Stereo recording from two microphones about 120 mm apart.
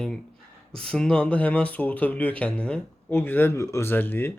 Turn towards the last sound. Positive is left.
turn(degrees=15)  # may be behind; listen again after turning